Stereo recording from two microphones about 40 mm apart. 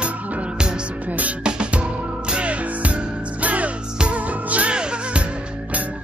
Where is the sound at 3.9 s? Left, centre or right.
Right.